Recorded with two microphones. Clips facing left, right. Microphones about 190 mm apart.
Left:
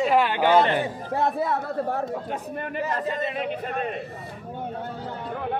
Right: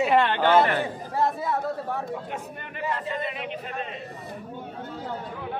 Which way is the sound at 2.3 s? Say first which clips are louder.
Left 6 dB; 40° left (ahead or behind).